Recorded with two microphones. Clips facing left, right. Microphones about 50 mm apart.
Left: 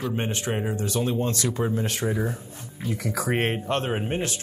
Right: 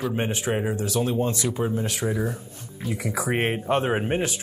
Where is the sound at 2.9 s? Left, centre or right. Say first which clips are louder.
Even; centre.